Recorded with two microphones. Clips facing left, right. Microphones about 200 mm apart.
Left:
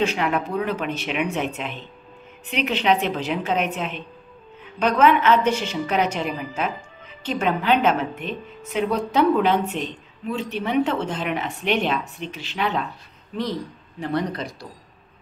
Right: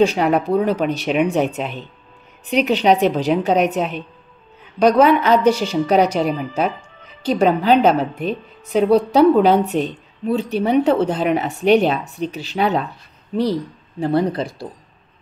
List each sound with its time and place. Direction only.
0.0 s a woman's voice: 35° right (ahead or behind)